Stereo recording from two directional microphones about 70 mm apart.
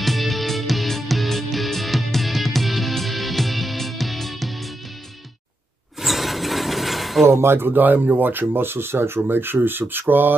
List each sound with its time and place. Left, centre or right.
0.0 s music: centre
5.9 s a sound: centre
7.2 s speech: right